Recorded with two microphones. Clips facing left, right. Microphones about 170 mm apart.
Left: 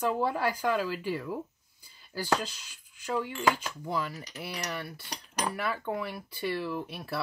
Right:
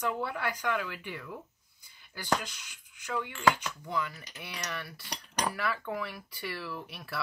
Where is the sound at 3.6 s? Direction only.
30° left (ahead or behind).